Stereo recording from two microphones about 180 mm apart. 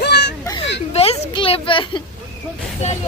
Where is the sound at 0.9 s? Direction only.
35° left (ahead or behind).